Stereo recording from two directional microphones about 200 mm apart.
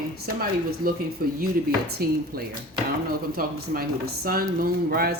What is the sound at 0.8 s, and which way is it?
Speech, 45° right (ahead or behind).